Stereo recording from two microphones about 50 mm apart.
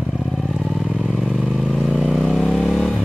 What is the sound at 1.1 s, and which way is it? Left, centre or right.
Vehicle, centre.